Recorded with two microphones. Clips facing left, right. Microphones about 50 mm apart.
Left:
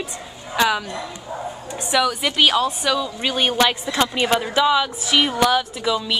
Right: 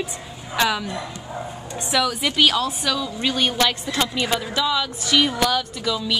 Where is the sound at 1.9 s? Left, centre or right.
Centre.